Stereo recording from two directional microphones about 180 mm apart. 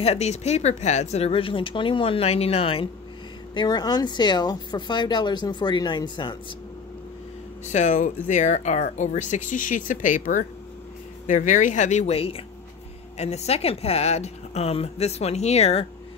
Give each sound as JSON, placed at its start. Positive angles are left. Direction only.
{"t": 0.0, "sound": "a woman's voice", "side_deg": 35}
{"t": 7.6, "sound": "a woman's voice", "side_deg": 40}